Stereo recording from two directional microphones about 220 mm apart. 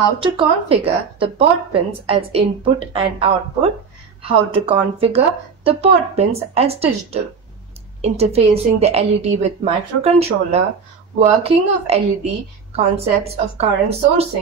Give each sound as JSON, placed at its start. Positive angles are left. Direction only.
{"t": 0.2, "sound": "speech", "side_deg": -25}